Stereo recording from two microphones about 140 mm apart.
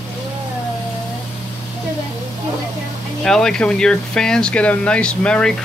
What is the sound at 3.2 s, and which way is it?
Speech, 5° left (ahead or behind).